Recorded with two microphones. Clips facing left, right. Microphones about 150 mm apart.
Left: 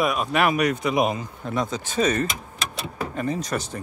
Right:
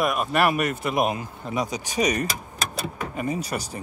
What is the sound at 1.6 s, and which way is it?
Speech, 15° right (ahead or behind).